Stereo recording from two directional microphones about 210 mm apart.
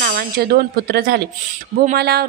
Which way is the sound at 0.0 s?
45° right (ahead or behind).